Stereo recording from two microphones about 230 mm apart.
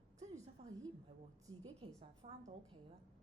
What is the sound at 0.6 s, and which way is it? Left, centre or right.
A woman's voice, right.